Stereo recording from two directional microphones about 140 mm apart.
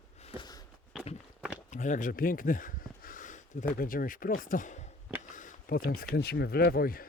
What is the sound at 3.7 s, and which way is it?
Speech, 90° left.